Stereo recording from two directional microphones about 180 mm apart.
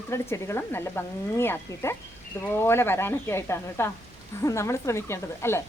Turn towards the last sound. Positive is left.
turn(degrees=15)  # may be behind; listen again after turning